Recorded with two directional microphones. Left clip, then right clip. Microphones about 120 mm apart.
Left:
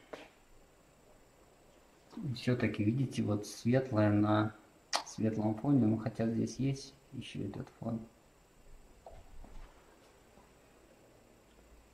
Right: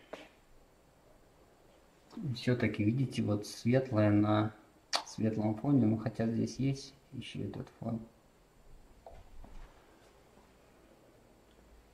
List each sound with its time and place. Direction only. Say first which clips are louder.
2.4 s speech: right 1 dB; 15° right (ahead or behind)
4.9 s speech: right 1 dB; 15° right (ahead or behind)
9.1 s a sound: even; 15° right (ahead or behind)